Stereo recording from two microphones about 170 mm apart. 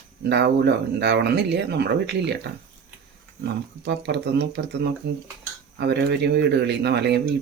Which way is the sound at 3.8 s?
85° right.